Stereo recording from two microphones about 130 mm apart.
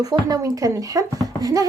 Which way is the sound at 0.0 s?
30° right (ahead or behind).